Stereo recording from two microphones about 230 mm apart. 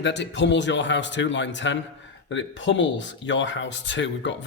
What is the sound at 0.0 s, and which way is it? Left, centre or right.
Speech, left.